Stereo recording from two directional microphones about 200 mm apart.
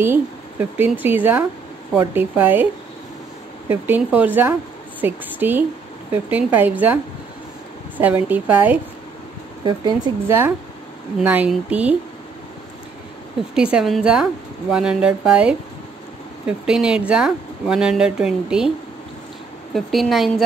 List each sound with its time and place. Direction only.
0.0 s speech: 10° right (ahead or behind)
8.0 s speech: 10° right (ahead or behind)
9.7 s speech: 20° right (ahead or behind)
13.6 s speech: 5° right (ahead or behind)
19.7 s speech: centre (ahead or behind)